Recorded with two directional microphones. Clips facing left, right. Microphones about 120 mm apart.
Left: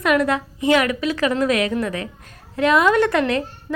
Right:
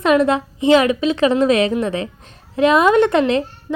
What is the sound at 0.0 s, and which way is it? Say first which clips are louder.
A woman's voice: right 4 dB; 25° right (ahead or behind).